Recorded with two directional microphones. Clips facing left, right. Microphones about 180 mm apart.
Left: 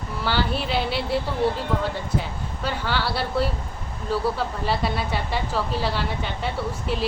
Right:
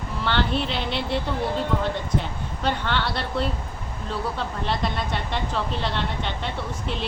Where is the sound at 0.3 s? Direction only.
5° left (ahead or behind).